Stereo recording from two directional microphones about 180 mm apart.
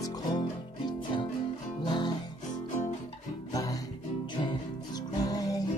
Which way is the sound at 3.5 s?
20° left (ahead or behind).